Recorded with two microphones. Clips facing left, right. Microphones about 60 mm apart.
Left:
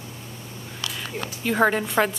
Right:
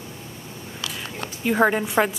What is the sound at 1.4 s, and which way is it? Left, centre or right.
Speech, centre.